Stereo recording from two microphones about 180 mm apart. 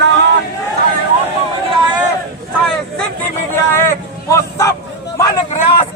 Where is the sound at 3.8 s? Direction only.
15° left (ahead or behind).